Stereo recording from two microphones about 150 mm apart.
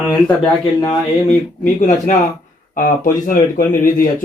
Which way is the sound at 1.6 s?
55° left (ahead or behind).